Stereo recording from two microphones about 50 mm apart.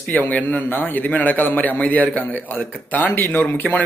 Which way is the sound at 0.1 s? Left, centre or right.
Left.